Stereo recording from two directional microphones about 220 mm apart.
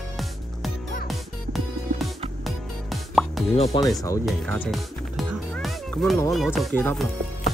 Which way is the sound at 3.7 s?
25° left (ahead or behind).